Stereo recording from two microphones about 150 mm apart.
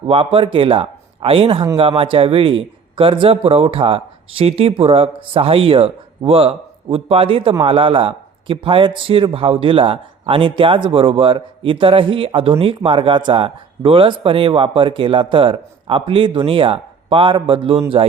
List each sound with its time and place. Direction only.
0.1 s a man's voice: 35° right (ahead or behind)